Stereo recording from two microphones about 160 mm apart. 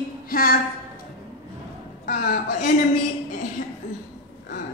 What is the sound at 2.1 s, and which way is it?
A woman's voice, 60° left (ahead or behind).